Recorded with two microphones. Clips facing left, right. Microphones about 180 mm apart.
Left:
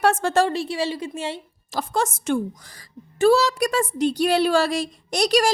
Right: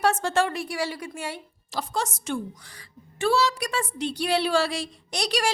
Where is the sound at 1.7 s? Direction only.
50° left (ahead or behind).